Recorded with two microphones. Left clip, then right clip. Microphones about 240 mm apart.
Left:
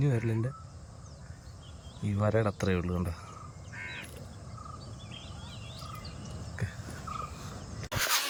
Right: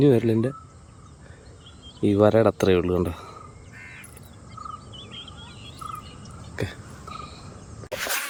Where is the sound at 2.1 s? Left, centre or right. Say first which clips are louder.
Right 12 dB; right.